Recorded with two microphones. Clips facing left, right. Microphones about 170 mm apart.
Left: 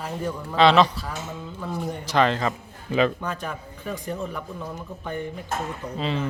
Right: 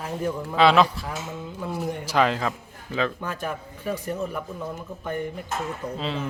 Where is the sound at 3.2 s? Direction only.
5° right (ahead or behind).